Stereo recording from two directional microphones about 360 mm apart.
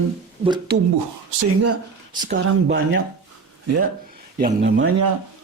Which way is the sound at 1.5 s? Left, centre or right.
Right.